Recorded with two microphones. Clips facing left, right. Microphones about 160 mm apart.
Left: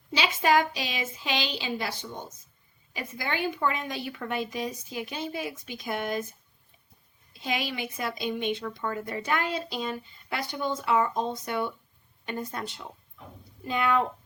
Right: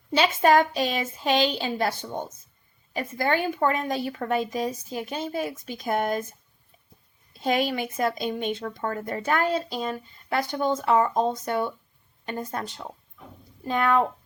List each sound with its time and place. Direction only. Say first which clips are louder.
0.1 s a woman's voice: right 5 dB; 50° right (ahead or behind)
7.3 s a woman's voice: right 7 dB; 45° right (ahead or behind)